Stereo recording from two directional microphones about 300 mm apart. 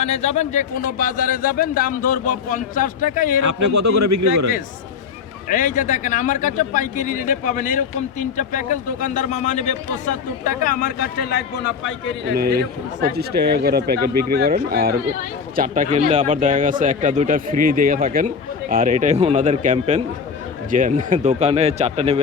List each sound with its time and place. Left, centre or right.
0.0 s a man's voice: left
3.4 s speech: right
5.5 s a man's voice: left
12.3 s speech: right